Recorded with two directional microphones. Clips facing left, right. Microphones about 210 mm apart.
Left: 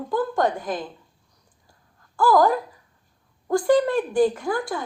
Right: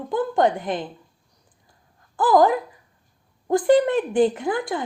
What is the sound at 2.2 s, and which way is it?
Speech, 20° right (ahead or behind).